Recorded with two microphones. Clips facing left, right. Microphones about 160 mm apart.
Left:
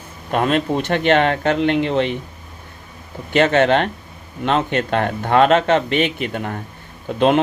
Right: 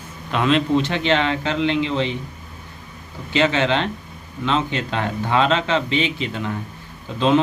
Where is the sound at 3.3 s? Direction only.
55° left (ahead or behind).